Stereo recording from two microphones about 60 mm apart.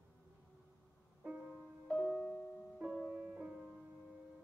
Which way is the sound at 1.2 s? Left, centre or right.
Right.